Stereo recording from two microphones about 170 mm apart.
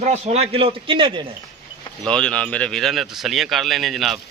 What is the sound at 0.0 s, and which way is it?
A man's voice, 40° right (ahead or behind).